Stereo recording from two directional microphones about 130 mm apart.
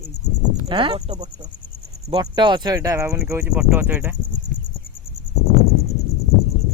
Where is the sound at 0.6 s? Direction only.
40° right (ahead or behind).